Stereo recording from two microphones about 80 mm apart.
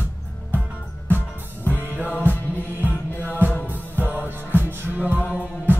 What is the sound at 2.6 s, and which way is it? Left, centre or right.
Music, right.